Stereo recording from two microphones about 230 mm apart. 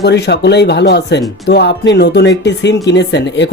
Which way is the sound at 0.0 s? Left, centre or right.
Left.